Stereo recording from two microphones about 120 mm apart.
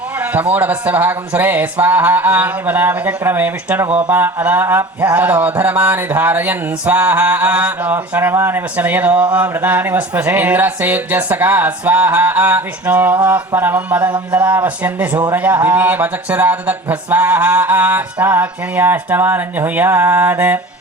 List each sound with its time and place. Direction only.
0.5 s speech: 15° right (ahead or behind)